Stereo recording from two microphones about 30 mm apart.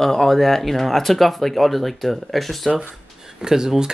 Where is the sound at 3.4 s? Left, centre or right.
Right.